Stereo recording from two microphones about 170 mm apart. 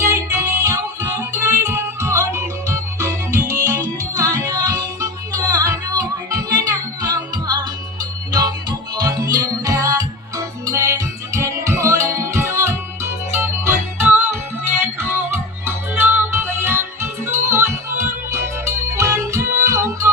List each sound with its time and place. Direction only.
0.0 s music: 15° right (ahead or behind)
9.0 s music: 20° right (ahead or behind)